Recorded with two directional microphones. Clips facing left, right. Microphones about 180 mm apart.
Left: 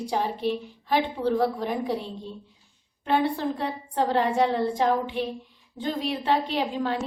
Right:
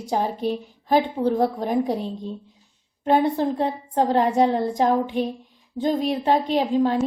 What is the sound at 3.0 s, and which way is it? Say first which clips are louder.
A woman's voice: right 5 dB; 40° right (ahead or behind).